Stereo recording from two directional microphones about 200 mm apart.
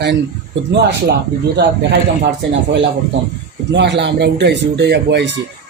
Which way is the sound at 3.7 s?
60° right (ahead or behind).